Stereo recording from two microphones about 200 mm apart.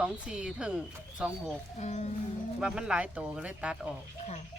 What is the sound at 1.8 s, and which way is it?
Speech, 35° left (ahead or behind).